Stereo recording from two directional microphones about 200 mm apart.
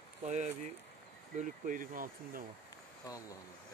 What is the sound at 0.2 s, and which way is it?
Speech, 35° right (ahead or behind).